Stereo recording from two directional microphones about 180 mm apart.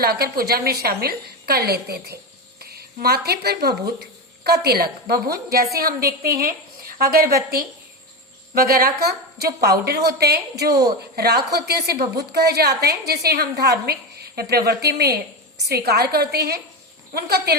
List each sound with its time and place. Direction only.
0.0 s a woman's voice: 60° right (ahead or behind)
8.5 s a woman's voice: 55° right (ahead or behind)